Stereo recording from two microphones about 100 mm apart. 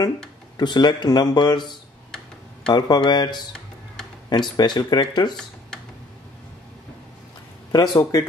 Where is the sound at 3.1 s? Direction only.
50° left (ahead or behind).